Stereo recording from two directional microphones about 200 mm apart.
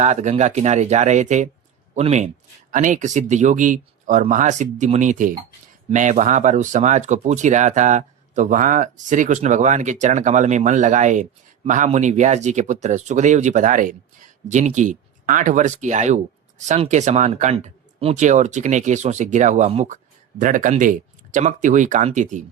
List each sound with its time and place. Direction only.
0.0 s speech: 35° right (ahead or behind)